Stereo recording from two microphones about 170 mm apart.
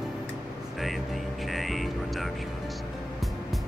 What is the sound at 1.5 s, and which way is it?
Music, centre (ahead or behind).